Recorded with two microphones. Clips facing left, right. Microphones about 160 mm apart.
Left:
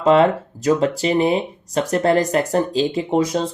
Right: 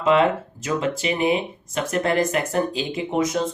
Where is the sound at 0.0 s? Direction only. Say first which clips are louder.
Left 4 dB; 40° left (ahead or behind).